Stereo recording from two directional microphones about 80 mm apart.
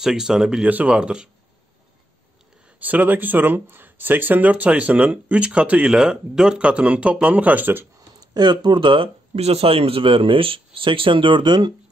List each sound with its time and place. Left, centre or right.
0.0 s speech: centre
2.8 s speech: right
8.2 s speech: right
10.0 s speech: right